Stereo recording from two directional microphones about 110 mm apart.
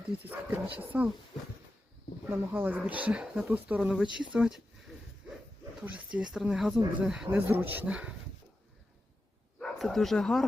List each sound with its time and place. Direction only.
0.3 s speech: 15° right (ahead or behind)
2.3 s speech: 15° right (ahead or behind)
5.2 s a sound: 5° right (ahead or behind)
5.8 s speech: 10° right (ahead or behind)
7.3 s speech: 20° right (ahead or behind)
9.6 s speech: 5° left (ahead or behind)